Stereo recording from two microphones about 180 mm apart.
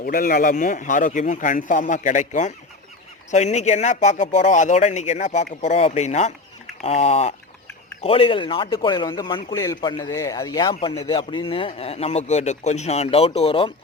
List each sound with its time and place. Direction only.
0.0 s a man's voice: 50° left (ahead or behind); by 10.8 s 20° left (ahead or behind)
10.8 s a man's voice: 30° left (ahead or behind)